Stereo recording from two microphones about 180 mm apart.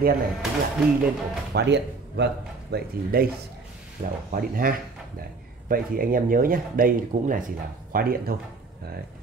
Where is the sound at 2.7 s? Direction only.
55° right (ahead or behind).